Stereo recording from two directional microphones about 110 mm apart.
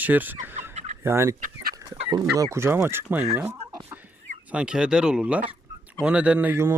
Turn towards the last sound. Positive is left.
turn(degrees=-20)  # may be behind; listen again after turning